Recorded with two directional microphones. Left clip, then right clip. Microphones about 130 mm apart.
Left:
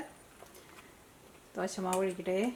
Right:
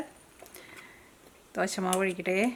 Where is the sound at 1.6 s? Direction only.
35° right (ahead or behind).